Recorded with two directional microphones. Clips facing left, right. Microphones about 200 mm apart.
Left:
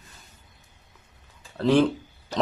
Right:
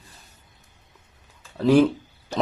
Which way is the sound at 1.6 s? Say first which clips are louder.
Right 3 dB; 10° right (ahead or behind).